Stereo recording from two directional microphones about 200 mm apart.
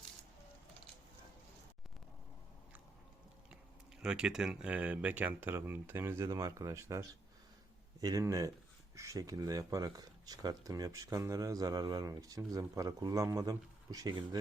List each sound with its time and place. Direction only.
4.0 s speech: 5° right (ahead or behind); by 14.3 s 20° right (ahead or behind)